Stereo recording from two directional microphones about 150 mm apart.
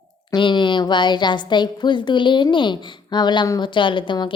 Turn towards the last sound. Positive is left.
turn(degrees=30)  # may be behind; listen again after turning